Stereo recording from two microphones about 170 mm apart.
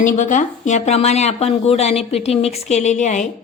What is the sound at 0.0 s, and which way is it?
Speech, 50° left (ahead or behind).